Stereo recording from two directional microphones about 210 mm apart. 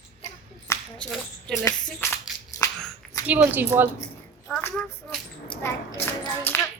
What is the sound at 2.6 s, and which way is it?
Dog, 15° left (ahead or behind).